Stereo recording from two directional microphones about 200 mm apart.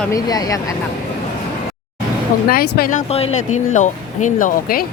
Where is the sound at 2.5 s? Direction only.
50° left (ahead or behind).